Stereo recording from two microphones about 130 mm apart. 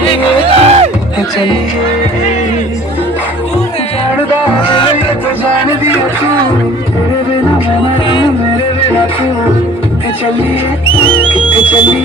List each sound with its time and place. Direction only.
0.4 s music: 55° right (ahead or behind)
4.7 s music: 40° left (ahead or behind)
8.0 s music: 40° left (ahead or behind)
11.0 s music: 40° left (ahead or behind)